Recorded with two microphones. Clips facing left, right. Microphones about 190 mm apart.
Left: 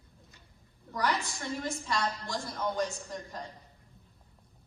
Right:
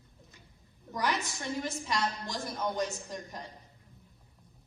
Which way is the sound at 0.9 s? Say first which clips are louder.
Left 1 dB; 20° right (ahead or behind).